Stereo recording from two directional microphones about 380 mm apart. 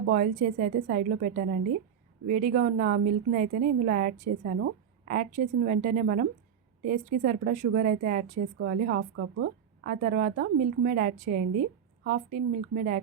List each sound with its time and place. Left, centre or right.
0.0 s a woman's voice: right